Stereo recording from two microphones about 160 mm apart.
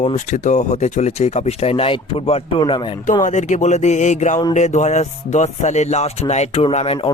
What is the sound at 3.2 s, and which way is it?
Speech, 50° left (ahead or behind).